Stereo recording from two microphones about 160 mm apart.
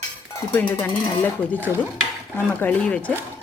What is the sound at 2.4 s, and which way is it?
Dishes, 10° left (ahead or behind).